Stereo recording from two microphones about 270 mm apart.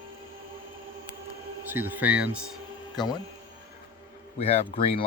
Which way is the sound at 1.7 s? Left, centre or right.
Centre.